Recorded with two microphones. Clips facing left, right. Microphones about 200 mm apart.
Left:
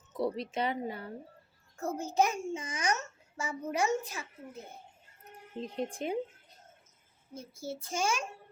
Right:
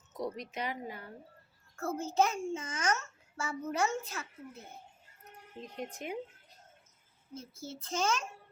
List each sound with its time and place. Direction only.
0.3 s speech: 30° left (ahead or behind)
1.7 s a child's voice: 15° left (ahead or behind)
5.5 s speech: 30° left (ahead or behind)
7.3 s a child's voice: 10° left (ahead or behind)